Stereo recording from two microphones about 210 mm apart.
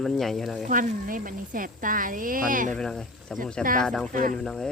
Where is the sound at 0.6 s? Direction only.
40° right (ahead or behind).